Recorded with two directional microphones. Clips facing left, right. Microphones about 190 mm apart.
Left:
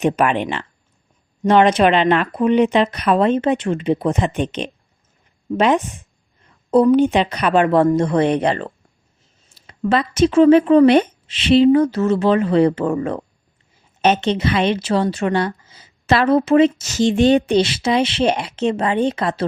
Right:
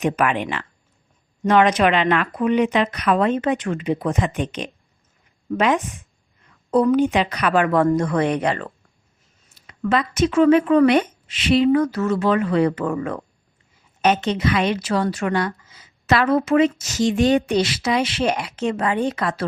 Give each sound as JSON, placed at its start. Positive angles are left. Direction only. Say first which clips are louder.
{"t": 0.0, "sound": "a woman's voice", "louder": "left 3 dB", "side_deg": 30}